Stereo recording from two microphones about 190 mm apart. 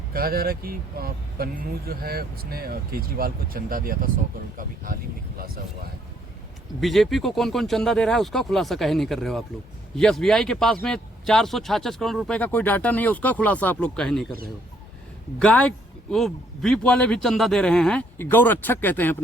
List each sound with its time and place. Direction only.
0.1 s speech: 50° right (ahead or behind)
6.7 s a man's voice: centre (ahead or behind)
15.4 s a man's voice: 5° left (ahead or behind)